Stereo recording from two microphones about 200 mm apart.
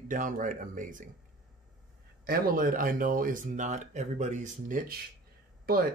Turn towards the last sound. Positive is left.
turn(degrees=-50)  # may be behind; listen again after turning